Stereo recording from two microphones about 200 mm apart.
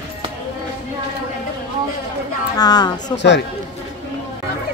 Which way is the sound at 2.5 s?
20° left (ahead or behind).